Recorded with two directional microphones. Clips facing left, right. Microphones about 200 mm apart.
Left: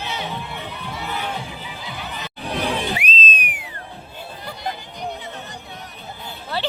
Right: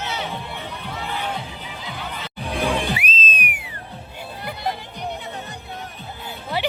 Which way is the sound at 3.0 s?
5° right (ahead or behind).